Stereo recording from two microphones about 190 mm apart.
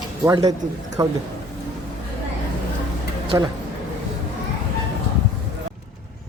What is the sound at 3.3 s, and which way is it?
Speech, 20° right (ahead or behind).